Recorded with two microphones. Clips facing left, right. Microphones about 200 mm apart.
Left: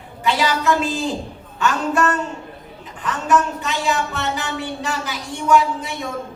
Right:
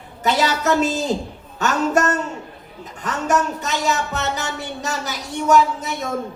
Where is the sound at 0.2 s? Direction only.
40° right (ahead or behind).